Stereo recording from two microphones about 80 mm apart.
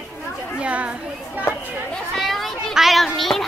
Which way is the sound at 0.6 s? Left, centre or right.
Centre.